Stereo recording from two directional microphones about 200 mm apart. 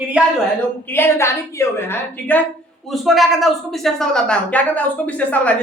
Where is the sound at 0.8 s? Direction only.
10° left (ahead or behind).